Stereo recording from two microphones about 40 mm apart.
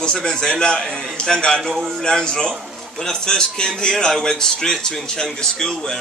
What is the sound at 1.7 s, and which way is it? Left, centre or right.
Speech, centre.